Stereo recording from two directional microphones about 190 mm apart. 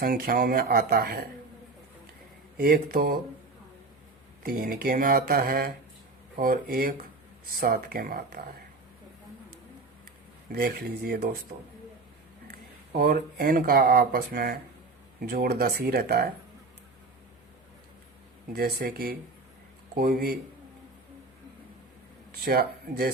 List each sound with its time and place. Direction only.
0.0 s speech: 50° right (ahead or behind)
2.6 s speech: 50° right (ahead or behind)
4.4 s speech: 50° right (ahead or behind)
10.5 s speech: 55° right (ahead or behind)
13.0 s speech: 50° right (ahead or behind)
18.5 s speech: 55° right (ahead or behind)
22.3 s speech: 55° right (ahead or behind)